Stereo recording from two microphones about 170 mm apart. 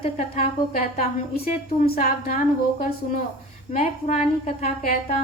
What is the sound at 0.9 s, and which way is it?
A woman's voice, 55° left (ahead or behind).